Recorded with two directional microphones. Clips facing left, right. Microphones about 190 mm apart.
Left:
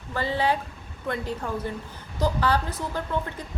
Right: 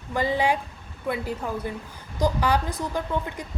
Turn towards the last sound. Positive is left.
turn(degrees=-15)  # may be behind; listen again after turning